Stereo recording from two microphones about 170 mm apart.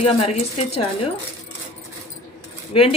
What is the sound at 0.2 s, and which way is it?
Speech, 40° left (ahead or behind).